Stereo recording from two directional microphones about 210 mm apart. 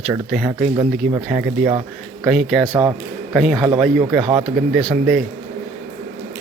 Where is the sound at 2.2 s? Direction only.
Centre (ahead or behind).